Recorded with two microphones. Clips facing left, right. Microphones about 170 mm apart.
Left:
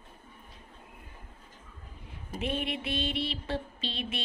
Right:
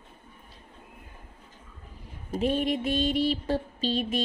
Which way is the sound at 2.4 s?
40° right (ahead or behind).